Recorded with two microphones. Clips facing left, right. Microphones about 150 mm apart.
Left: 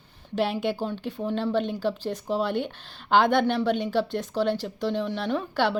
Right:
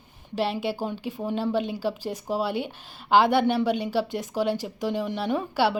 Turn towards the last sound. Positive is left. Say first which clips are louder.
# right 1 dB
turn(degrees=-10)  # may be behind; listen again after turning